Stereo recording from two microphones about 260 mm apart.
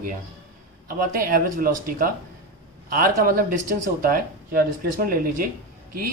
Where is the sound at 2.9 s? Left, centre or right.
Right.